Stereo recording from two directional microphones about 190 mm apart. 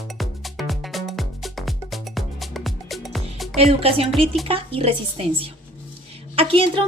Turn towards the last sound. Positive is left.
turn(degrees=-30)  # may be behind; listen again after turning